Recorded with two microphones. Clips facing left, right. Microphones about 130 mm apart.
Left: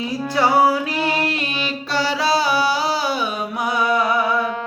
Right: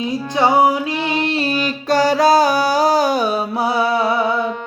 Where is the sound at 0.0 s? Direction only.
20° right (ahead or behind).